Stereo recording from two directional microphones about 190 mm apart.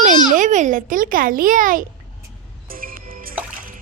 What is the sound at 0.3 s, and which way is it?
A child's voice, 40° right (ahead or behind).